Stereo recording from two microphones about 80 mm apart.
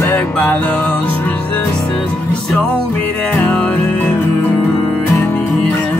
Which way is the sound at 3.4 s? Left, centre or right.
Centre.